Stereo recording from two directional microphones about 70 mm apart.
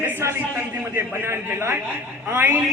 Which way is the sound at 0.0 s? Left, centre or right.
Right.